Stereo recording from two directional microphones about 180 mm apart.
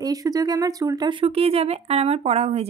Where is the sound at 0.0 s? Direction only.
20° right (ahead or behind).